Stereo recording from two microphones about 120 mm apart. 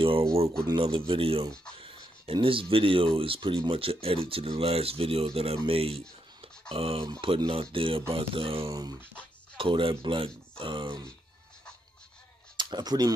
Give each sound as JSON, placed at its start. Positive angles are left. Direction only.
{"t": 0.0, "sound": "a sound", "side_deg": -50}
{"t": 0.7, "sound": "speech", "side_deg": -45}
{"t": 12.5, "sound": "speech", "side_deg": -35}